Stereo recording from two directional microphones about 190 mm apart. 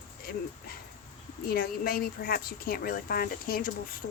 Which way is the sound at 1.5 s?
50° left (ahead or behind).